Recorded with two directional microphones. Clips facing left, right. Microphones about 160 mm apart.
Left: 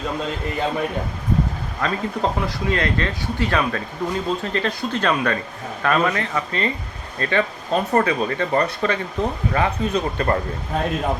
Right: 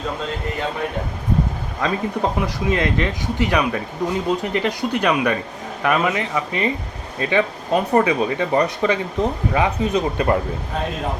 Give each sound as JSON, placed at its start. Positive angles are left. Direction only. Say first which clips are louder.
{"t": 1.8, "sound": "speech", "louder": "right 1 dB", "side_deg": -15}